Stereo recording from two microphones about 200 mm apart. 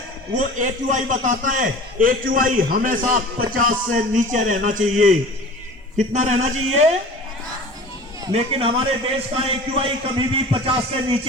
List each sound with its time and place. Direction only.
0.3 s a man's voice: 40° right (ahead or behind)
6.1 s a man's voice: 35° right (ahead or behind)
8.3 s a man's voice: 30° right (ahead or behind)